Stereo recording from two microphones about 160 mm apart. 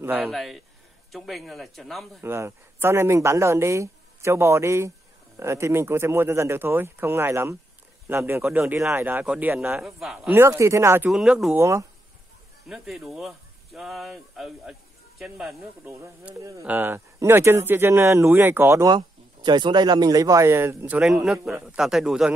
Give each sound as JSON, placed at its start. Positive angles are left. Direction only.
{"t": 0.0, "sound": "speech", "side_deg": -10}
{"t": 0.3, "sound": "speech", "side_deg": 0}
{"t": 2.2, "sound": "speech", "side_deg": -15}
{"t": 11.1, "sound": "speech", "side_deg": -5}
{"t": 11.5, "sound": "speech", "side_deg": -15}
{"t": 12.6, "sound": "speech", "side_deg": -5}
{"t": 15.9, "sound": "speech", "side_deg": -20}
{"t": 18.9, "sound": "speech", "side_deg": -30}